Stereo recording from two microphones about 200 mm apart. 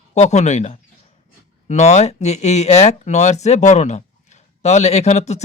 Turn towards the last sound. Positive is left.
turn(degrees=35)  # may be behind; listen again after turning